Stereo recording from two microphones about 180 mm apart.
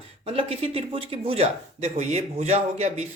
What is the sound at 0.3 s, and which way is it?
Speech, 30° right (ahead or behind).